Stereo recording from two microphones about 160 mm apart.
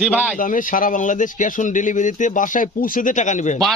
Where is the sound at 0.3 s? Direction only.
55° left (ahead or behind).